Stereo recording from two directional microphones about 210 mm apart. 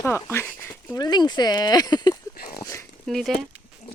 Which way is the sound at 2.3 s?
45° left (ahead or behind).